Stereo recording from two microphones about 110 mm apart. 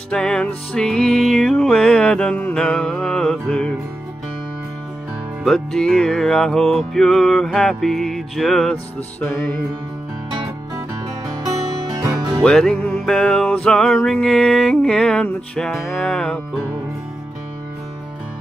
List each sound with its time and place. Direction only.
0.1 s music: 5° left (ahead or behind)
5.4 s music: 5° left (ahead or behind)
12.0 s music: 40° right (ahead or behind)
12.4 s music: 5° left (ahead or behind)